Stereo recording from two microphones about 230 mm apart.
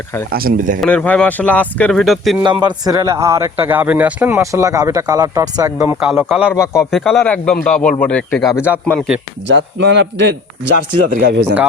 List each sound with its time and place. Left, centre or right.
0.3 s speech: right
0.8 s speech: centre
2.4 s speech: centre
6.0 s speech: centre
6.5 s a man's voice: centre
6.9 s a man's voice: centre
10.1 s a man's voice: right
11.1 s speech: right